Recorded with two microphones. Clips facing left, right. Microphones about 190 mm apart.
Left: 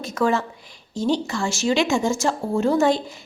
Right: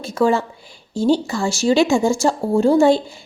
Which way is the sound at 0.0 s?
30° right (ahead or behind).